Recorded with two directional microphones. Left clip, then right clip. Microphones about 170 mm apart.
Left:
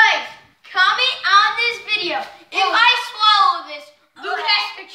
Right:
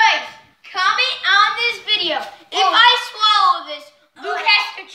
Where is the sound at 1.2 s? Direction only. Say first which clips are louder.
Left 1 dB; 10° right (ahead or behind).